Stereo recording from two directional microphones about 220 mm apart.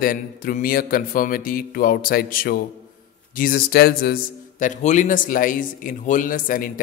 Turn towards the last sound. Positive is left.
turn(degrees=40)  # may be behind; listen again after turning